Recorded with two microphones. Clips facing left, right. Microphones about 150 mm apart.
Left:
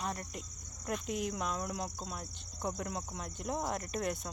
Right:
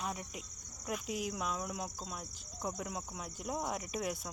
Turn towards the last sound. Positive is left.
turn(degrees=-5)  # may be behind; listen again after turning